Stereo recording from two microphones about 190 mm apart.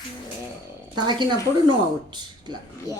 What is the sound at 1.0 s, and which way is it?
Speech, 25° right (ahead or behind).